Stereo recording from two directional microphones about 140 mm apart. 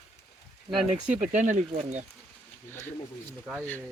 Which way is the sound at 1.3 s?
60° right (ahead or behind).